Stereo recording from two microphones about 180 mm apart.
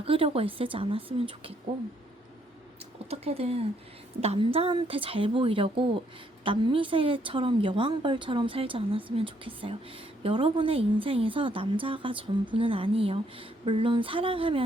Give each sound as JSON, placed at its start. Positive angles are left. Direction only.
{"t": 0.0, "sound": "speech", "side_deg": -30}
{"t": 3.1, "sound": "a woman's voice", "side_deg": -35}